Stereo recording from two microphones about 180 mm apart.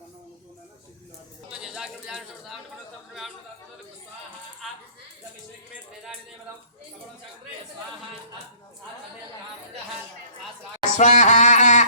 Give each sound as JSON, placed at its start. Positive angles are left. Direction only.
{"t": 1.5, "sound": "bird", "side_deg": -5}
{"t": 10.9, "sound": "music", "side_deg": 40}